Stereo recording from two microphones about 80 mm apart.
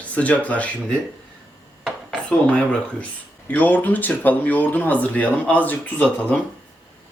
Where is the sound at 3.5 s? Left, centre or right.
Left.